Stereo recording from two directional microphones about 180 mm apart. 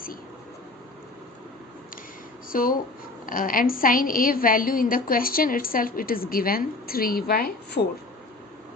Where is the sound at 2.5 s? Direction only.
50° left (ahead or behind).